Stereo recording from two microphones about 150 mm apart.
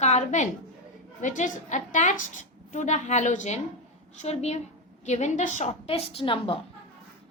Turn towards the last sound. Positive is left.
turn(degrees=35)  # may be behind; listen again after turning